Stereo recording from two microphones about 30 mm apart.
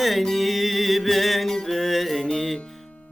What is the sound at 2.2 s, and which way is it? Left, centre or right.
Music, centre.